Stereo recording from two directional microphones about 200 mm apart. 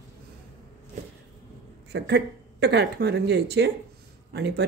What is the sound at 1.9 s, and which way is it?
Speech, 55° right (ahead or behind).